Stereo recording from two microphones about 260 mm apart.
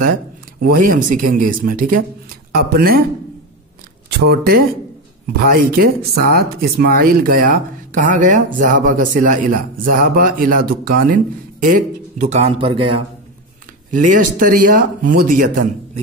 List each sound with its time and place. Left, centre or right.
0.6 s speech: right
4.3 s speech: right